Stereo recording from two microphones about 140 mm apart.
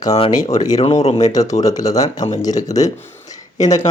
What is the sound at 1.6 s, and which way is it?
Speech, 25° left (ahead or behind).